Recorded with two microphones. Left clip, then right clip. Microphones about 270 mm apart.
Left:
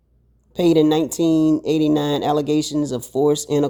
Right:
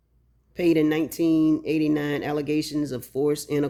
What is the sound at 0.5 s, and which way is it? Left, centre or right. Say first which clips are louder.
Speech: left 6 dB; left.